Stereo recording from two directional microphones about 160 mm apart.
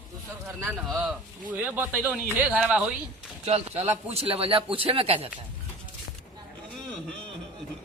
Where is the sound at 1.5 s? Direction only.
10° right (ahead or behind).